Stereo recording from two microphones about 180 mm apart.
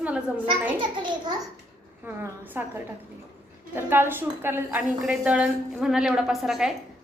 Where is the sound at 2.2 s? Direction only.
10° right (ahead or behind).